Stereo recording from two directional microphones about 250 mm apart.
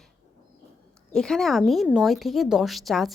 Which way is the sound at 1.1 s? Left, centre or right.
Centre.